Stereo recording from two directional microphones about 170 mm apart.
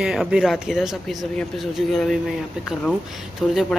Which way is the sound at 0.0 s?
5° right (ahead or behind).